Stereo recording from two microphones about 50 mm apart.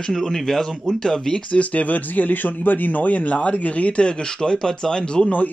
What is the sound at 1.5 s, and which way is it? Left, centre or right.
Speech, left.